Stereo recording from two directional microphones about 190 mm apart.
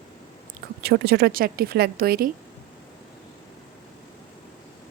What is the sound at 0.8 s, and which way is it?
Speech, 55° right (ahead or behind).